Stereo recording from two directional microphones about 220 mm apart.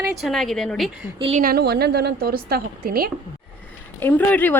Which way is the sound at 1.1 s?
25° right (ahead or behind).